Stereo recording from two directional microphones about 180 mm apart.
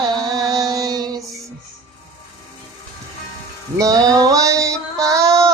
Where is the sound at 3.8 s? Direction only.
20° right (ahead or behind).